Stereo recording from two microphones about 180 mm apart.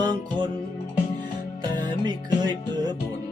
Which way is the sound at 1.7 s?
25° right (ahead or behind).